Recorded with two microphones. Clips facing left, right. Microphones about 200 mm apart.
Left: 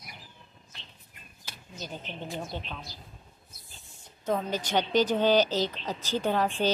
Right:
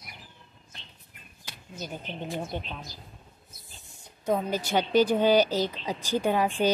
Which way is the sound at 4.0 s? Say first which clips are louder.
Right 2 dB; 10° right (ahead or behind).